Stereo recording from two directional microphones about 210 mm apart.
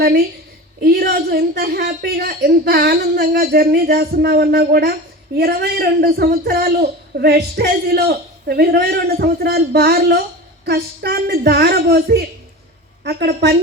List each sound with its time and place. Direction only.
0.8 s a man's voice: 45° right (ahead or behind)